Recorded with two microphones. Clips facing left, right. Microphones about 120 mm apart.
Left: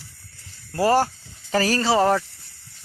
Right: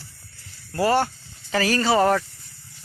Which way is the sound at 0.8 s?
35° left (ahead or behind).